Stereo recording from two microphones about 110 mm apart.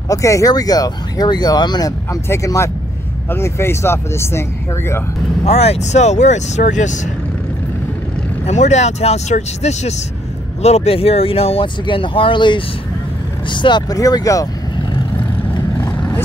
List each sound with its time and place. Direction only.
0.1 s speech: 30° left (ahead or behind)
2.2 s speech: 25° left (ahead or behind)
5.4 s speech: 70° left (ahead or behind); by 7.0 s 90° left
8.5 s speech: 90° left
10.6 s speech: 75° left (ahead or behind); by 14.5 s 30° left (ahead or behind)